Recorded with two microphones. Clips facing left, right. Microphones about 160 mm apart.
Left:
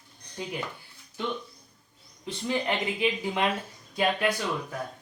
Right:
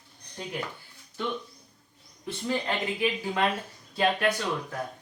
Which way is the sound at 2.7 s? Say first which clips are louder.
Left 1 dB; 20° left (ahead or behind).